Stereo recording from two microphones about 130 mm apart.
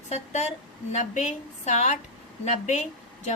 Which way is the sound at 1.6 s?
65° left (ahead or behind).